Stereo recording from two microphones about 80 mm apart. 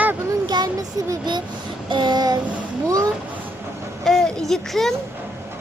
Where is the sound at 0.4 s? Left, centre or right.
Right.